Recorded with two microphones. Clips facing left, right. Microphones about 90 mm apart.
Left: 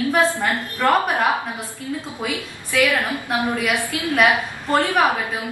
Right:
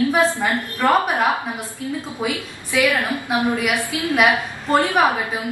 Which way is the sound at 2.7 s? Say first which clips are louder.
Right 1 dB; 15° right (ahead or behind).